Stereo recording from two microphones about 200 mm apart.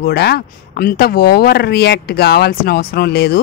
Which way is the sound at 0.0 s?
55° left (ahead or behind).